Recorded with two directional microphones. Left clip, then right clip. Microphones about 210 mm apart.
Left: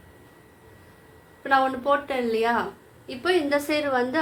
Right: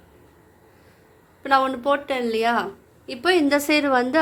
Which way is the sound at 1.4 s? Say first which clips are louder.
Right 2 dB; 40° right (ahead or behind).